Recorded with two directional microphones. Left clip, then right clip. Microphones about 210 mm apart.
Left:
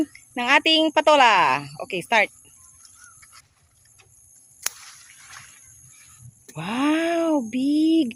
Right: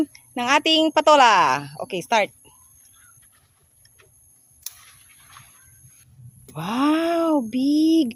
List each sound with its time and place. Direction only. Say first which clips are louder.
0.0 s speech: right 1 dB; 10° right (ahead or behind)
6.5 s speech: right 2 dB; 10° right (ahead or behind)